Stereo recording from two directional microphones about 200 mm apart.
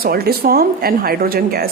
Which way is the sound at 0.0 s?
50° right (ahead or behind).